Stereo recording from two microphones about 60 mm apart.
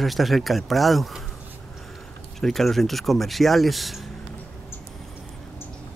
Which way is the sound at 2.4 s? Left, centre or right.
Centre.